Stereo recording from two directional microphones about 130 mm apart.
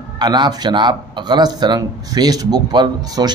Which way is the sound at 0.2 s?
30° right (ahead or behind).